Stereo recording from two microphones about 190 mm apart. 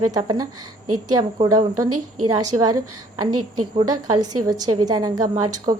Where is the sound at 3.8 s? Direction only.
20° right (ahead or behind).